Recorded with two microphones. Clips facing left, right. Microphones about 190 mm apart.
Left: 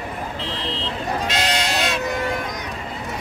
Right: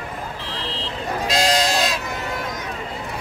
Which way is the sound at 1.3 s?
35° right (ahead or behind).